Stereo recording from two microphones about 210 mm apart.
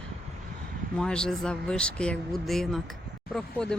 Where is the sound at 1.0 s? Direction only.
5° left (ahead or behind).